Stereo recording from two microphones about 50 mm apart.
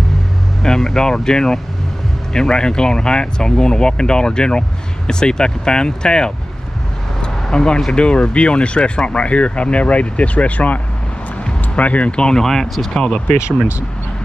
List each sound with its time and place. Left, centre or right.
0.6 s speech: centre
7.5 s speech: centre